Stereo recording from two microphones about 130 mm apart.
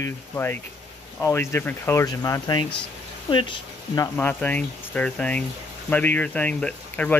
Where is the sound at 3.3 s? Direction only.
40° left (ahead or behind).